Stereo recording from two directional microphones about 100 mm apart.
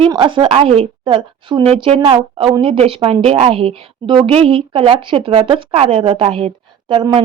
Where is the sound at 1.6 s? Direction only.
85° right.